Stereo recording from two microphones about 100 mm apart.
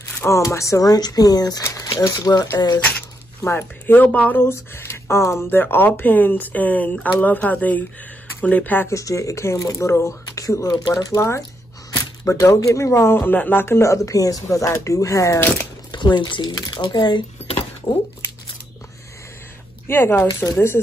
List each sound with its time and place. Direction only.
0.2 s speech: 30° left (ahead or behind)
3.4 s speech: 20° left (ahead or behind)
15.9 s speech: 50° left (ahead or behind)
19.9 s speech: 20° left (ahead or behind)